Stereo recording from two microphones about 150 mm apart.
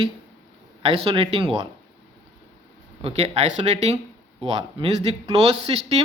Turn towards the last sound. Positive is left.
turn(degrees=-40)  # may be behind; listen again after turning